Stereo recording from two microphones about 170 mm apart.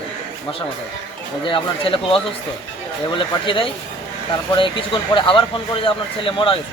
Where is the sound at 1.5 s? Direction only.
30° left (ahead or behind).